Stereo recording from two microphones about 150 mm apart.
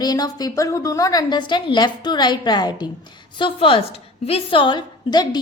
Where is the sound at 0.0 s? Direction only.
25° left (ahead or behind).